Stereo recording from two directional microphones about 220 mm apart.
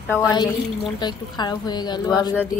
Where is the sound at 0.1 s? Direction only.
20° left (ahead or behind).